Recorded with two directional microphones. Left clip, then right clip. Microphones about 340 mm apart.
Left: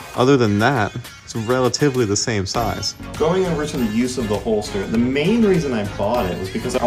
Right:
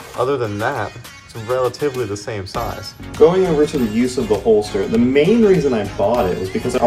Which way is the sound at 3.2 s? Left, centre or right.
Centre.